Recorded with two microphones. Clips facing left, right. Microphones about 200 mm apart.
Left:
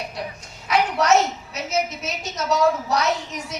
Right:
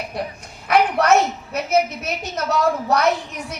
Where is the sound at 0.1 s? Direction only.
55° right (ahead or behind).